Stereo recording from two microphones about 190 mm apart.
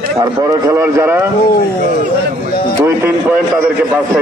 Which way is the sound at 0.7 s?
10° right (ahead or behind).